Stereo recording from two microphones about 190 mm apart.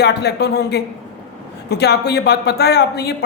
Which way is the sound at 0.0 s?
60° left (ahead or behind).